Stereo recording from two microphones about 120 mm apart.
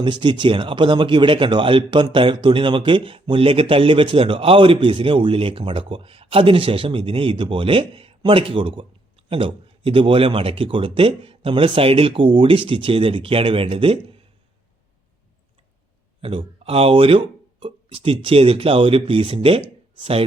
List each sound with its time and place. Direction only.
0.0 s speech: 40° right (ahead or behind)
16.2 s speech: 50° right (ahead or behind)